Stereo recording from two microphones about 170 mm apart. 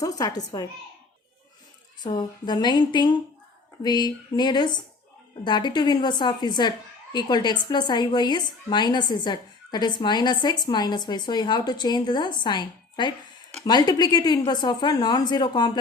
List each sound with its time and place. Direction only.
0.0 s a woman's voice: 20° left (ahead or behind)
2.0 s a woman's voice: 25° left (ahead or behind)